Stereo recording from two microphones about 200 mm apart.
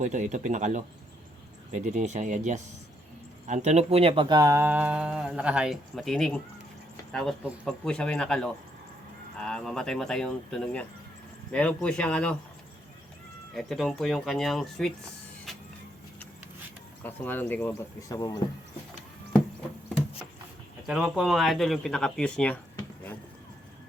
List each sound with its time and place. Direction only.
0.0 s speech: 35° right (ahead or behind); by 12.4 s 5° left (ahead or behind)
13.5 s speech: centre (ahead or behind)
15.5 s vehicle: centre (ahead or behind)
17.0 s speech: 10° left (ahead or behind)
20.8 s speech: centre (ahead or behind)